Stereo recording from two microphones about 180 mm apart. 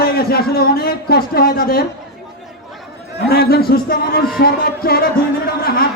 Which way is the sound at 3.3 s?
60° left (ahead or behind).